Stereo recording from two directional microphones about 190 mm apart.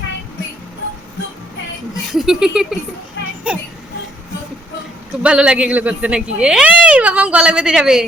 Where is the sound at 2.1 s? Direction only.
Centre (ahead or behind).